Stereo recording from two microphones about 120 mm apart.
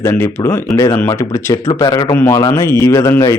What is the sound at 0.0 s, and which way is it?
Speech, 20° left (ahead or behind).